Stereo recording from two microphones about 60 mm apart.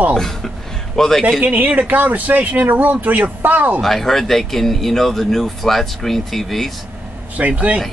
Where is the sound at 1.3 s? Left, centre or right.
Right.